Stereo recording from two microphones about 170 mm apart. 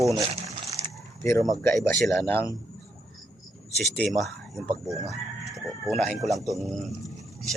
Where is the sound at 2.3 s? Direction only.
15° left (ahead or behind).